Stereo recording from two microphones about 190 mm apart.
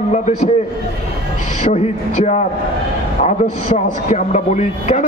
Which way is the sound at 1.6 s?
35° left (ahead or behind).